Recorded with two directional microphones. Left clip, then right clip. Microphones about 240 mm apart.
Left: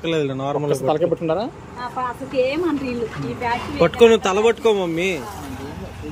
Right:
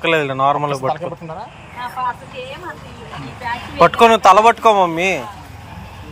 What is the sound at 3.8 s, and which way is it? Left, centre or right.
Speech, centre.